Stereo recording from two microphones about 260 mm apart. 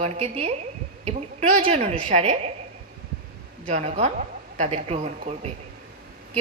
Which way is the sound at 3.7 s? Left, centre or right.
Right.